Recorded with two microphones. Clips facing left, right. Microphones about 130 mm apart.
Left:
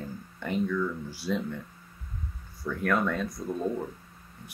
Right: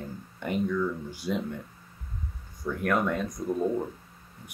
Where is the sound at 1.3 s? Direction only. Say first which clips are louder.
Even; 20° right (ahead or behind).